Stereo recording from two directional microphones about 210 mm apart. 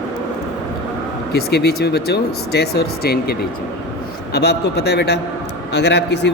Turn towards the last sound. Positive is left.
turn(degrees=55)  # may be behind; listen again after turning